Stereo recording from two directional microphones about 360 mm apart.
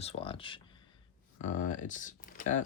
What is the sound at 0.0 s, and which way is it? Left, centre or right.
Speech, centre.